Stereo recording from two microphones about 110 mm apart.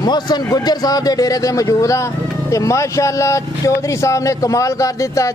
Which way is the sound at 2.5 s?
30° left (ahead or behind).